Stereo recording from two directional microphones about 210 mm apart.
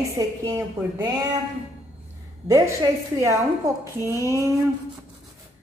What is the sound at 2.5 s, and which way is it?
Speech, 15° right (ahead or behind).